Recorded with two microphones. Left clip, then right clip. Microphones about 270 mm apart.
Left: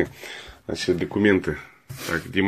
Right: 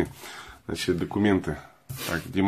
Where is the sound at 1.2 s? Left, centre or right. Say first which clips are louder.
Left 6 dB; centre.